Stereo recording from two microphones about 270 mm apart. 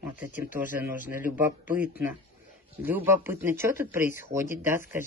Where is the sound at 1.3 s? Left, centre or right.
Centre.